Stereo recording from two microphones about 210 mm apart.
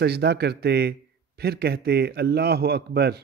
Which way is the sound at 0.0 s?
50° right (ahead or behind).